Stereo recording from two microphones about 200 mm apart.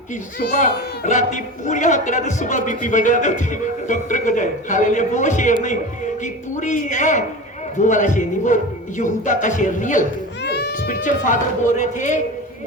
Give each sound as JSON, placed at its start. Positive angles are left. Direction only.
{"t": 0.3, "sound": "speech", "side_deg": 45}
{"t": 10.4, "sound": "cat", "side_deg": 55}
{"t": 11.8, "sound": "speech", "side_deg": 40}